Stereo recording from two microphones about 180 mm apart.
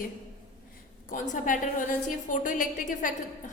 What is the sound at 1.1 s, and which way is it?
A woman's voice, 45° left (ahead or behind).